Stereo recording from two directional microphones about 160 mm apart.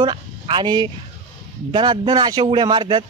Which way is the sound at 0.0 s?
30° right (ahead or behind).